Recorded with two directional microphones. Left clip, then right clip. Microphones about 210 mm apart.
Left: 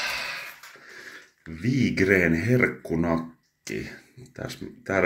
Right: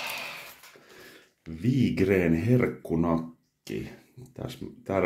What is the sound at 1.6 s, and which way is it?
Speech, centre (ahead or behind).